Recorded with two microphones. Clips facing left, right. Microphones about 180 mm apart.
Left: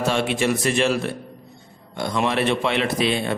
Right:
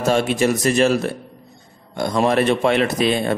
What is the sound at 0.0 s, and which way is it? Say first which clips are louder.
A man's voice: right 4 dB; 40° right (ahead or behind).